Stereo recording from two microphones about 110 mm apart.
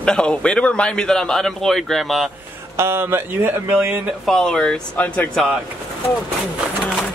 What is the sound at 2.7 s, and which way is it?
Speech, 20° right (ahead or behind).